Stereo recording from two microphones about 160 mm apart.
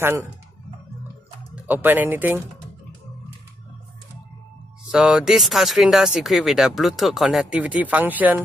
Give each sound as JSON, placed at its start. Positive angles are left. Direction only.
{"t": 0.0, "sound": "speech", "side_deg": -15}
{"t": 1.5, "sound": "speech", "side_deg": -10}
{"t": 4.9, "sound": "speech", "side_deg": 0}